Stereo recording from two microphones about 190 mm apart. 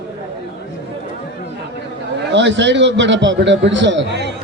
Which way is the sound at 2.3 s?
70° right (ahead or behind).